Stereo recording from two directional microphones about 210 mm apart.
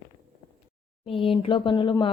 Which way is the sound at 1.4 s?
25° left (ahead or behind).